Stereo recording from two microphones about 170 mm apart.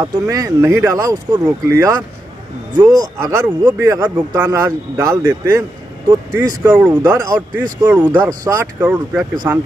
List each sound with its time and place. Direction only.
0.0 s speech: 20° right (ahead or behind)